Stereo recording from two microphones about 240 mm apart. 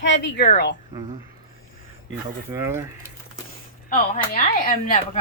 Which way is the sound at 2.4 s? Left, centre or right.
Centre.